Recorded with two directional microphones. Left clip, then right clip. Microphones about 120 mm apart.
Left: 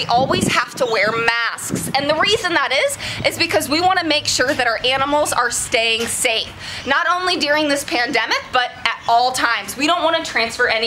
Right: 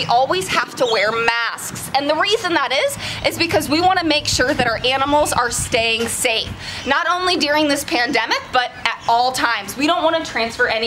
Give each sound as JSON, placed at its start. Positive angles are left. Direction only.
{"t": 0.0, "sound": "speech", "side_deg": 5}